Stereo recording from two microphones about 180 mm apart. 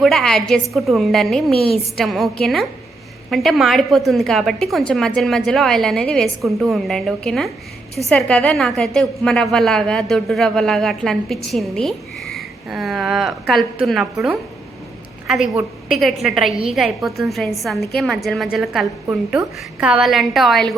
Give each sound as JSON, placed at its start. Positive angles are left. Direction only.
{"t": 0.0, "sound": "a woman's voice", "side_deg": 0}
{"t": 15.5, "sound": "a woman's voice", "side_deg": 0}